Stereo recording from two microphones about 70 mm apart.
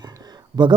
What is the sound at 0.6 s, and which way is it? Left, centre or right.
Speech, right.